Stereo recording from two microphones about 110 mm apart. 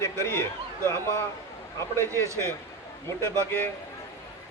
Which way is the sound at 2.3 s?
30° right (ahead or behind).